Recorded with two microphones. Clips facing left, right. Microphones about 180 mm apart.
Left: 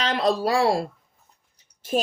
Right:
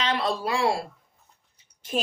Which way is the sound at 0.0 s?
40° left (ahead or behind).